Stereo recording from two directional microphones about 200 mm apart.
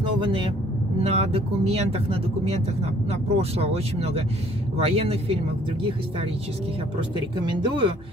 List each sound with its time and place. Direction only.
0.2 s speech: 25° right (ahead or behind)
7.2 s speech: 20° right (ahead or behind)